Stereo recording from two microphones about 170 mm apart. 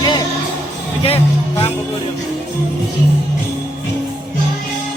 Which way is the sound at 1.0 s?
35° left (ahead or behind).